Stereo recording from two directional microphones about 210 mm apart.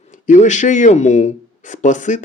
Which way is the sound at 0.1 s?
35° left (ahead or behind).